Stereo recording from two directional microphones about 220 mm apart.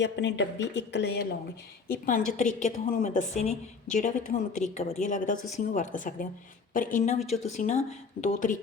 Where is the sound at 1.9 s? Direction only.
35° left (ahead or behind).